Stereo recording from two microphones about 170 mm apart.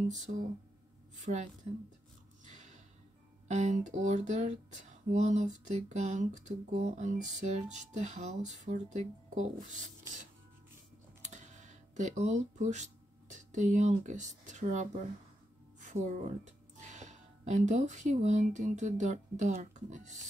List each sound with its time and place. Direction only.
1.2 s speech: 45° right (ahead or behind)
2.4 s a sound: 45° right (ahead or behind)
3.4 s speech: 45° right (ahead or behind)
11.2 s speech: 45° right (ahead or behind)